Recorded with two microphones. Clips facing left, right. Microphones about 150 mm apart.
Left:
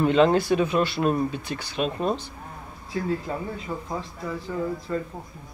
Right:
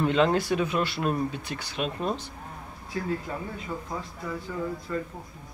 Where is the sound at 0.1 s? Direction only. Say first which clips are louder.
Left 4 dB; 30° left (ahead or behind).